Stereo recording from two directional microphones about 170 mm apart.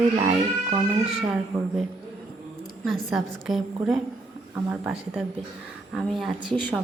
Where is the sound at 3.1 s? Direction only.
Centre (ahead or behind).